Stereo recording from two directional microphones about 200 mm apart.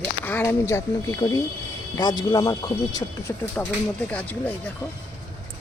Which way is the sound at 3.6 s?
10° left (ahead or behind).